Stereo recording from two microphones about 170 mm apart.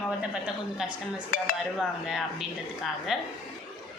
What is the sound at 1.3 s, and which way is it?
Dishes, 55° left (ahead or behind).